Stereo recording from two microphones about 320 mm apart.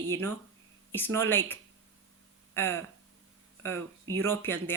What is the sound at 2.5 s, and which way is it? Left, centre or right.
Speech, centre.